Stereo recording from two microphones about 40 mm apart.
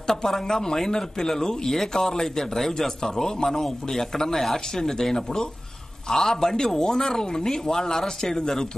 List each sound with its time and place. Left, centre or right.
0.0 s speech: centre